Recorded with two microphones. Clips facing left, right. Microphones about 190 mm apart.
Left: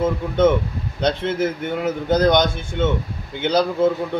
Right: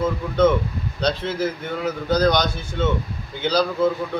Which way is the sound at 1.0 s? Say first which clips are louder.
Left 3 dB; 25° left (ahead or behind).